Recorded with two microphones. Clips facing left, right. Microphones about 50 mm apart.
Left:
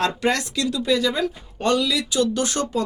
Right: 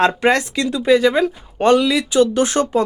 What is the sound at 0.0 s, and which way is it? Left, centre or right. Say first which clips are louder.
Speech: right 7 dB; right.